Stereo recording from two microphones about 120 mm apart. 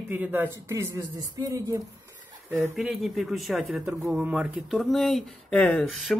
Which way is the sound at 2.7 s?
Centre (ahead or behind).